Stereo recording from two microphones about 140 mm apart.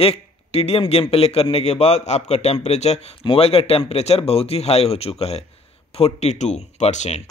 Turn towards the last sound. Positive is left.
turn(degrees=55)  # may be behind; listen again after turning